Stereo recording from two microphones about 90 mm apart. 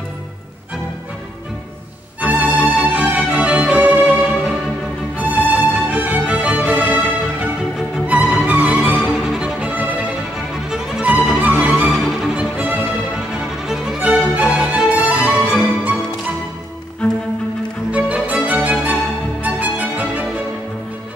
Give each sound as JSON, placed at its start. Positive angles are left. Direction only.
{"t": 2.2, "sound": "music", "side_deg": -15}
{"t": 8.9, "sound": "music", "side_deg": -5}
{"t": 12.4, "sound": "music", "side_deg": -15}
{"t": 17.9, "sound": "music", "side_deg": -15}